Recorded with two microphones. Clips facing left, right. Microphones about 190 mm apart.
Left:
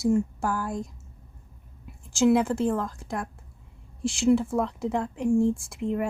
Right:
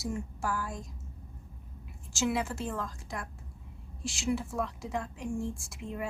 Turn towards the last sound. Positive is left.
turn(degrees=60)  # may be behind; listen again after turning